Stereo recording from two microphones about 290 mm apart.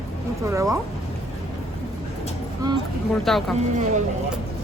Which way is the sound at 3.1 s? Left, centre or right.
Centre.